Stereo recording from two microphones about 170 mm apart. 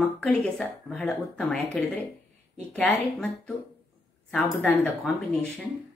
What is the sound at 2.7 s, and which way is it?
Speech, 5° left (ahead or behind).